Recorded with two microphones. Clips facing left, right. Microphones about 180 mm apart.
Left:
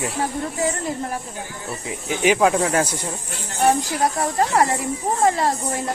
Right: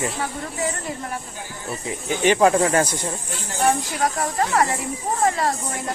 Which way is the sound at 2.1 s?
5° left (ahead or behind).